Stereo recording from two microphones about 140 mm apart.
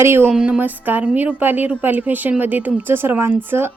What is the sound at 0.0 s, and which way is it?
Speech, 20° right (ahead or behind).